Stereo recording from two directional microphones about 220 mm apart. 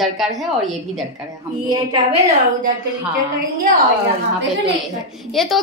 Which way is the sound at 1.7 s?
20° right (ahead or behind).